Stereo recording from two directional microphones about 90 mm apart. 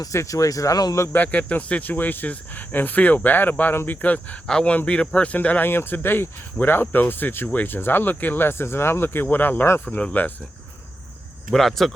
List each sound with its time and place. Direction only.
0.0 s speech: 35° left (ahead or behind)
1.0 s speech: 20° left (ahead or behind)
11.5 s speech: 5° left (ahead or behind)